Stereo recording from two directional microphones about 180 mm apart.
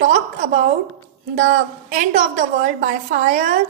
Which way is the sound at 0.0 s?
40° right (ahead or behind).